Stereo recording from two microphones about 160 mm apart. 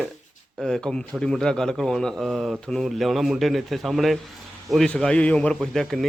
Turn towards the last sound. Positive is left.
turn(degrees=5)  # may be behind; listen again after turning